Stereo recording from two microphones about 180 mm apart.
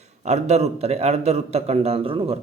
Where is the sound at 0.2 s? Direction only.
40° right (ahead or behind).